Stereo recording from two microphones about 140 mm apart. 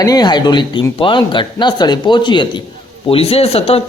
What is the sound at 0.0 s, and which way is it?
A man's voice, 30° left (ahead or behind).